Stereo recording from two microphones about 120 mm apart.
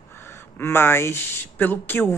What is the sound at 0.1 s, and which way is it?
Speech, 20° left (ahead or behind).